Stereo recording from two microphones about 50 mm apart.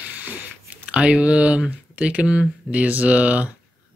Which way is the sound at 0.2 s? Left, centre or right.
Right.